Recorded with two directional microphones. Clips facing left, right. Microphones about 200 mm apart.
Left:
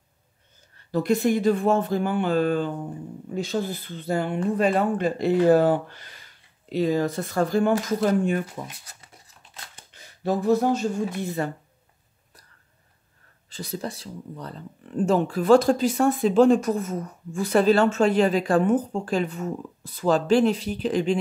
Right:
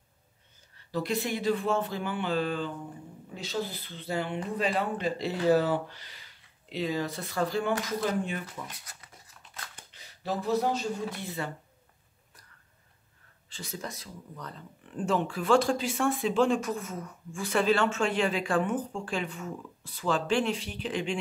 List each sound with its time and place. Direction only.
0.9 s speech: 45° left (ahead or behind)
9.0 s scissors: 25° left (ahead or behind)
9.9 s speech: 50° left (ahead or behind)
13.5 s speech: 35° left (ahead or behind)